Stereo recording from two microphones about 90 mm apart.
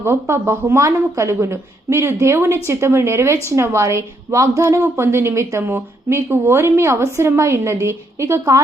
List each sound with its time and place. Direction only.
0.0 s a woman's voice: 30° right (ahead or behind)